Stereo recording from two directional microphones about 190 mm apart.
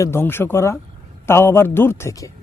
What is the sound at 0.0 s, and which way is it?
A man's voice, 10° left (ahead or behind).